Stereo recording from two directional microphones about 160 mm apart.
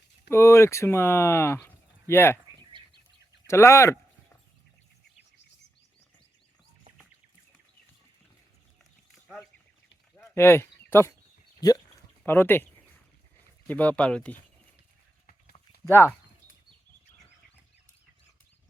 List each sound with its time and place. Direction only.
0.3 s speech: 15° left (ahead or behind)
2.8 s chicken: 30° right (ahead or behind)
3.4 s speech: 15° left (ahead or behind)
10.2 s a sound: 15° left (ahead or behind)
11.6 s speech: 25° left (ahead or behind)
13.7 s speech: 10° left (ahead or behind)
15.9 s speech: 15° left (ahead or behind)